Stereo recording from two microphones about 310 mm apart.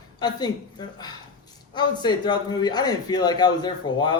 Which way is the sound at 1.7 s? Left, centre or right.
Centre.